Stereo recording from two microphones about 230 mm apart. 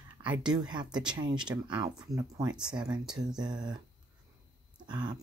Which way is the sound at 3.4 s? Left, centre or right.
Centre.